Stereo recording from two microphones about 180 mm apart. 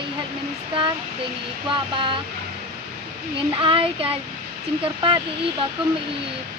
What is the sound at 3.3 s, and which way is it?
Speech, 30° right (ahead or behind).